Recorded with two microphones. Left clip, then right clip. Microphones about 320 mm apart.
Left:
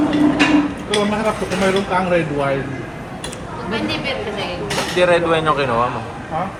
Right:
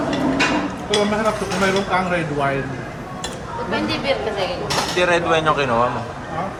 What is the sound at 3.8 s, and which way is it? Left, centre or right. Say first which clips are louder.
Speech: even; right.